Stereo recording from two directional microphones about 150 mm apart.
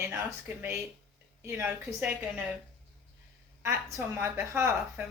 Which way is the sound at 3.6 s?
15° right (ahead or behind).